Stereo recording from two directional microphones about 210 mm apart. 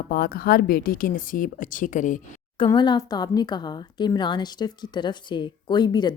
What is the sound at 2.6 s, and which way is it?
Speech, 20° left (ahead or behind).